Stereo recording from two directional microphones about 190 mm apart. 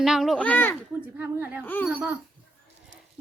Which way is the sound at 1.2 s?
10° right (ahead or behind).